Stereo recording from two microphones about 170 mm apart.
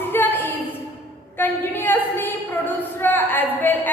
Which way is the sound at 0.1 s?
10° left (ahead or behind).